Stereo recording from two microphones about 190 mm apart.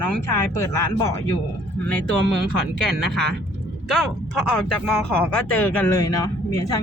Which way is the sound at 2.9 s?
5° left (ahead or behind).